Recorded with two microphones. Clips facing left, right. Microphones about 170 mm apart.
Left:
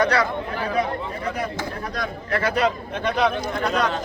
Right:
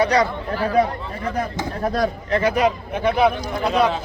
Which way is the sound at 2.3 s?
15° right (ahead or behind).